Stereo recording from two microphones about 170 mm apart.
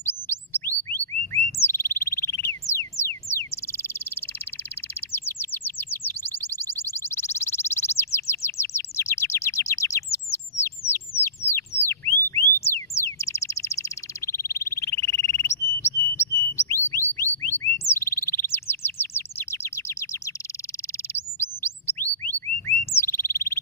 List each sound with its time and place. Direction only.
0.0 s chirp: 10° left (ahead or behind)
2.7 s a sound: 15° left (ahead or behind)
5.1 s chirp: 15° left (ahead or behind)
10.1 s bird: 15° left (ahead or behind)
11.8 s a sound: 15° left (ahead or behind)
17.1 s bird: 15° left (ahead or behind)
21.1 s chirp: 15° left (ahead or behind)
22.7 s bird: 15° left (ahead or behind)